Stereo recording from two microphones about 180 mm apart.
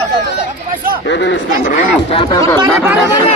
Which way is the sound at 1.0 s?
80° left.